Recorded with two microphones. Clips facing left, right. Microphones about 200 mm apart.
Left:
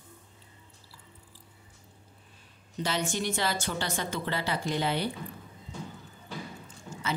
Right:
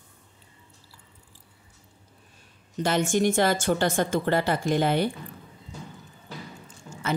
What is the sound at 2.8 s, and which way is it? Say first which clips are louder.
A woman's voice: right 8 dB; 50° right (ahead or behind).